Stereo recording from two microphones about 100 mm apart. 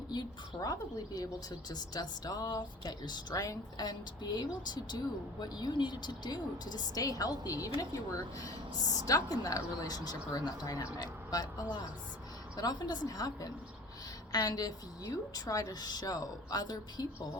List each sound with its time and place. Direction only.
0.1 s a woman's voice: 40° left (ahead or behind)
3.3 s a woman's voice: 35° left (ahead or behind)
9.0 s a woman's voice: 40° left (ahead or behind)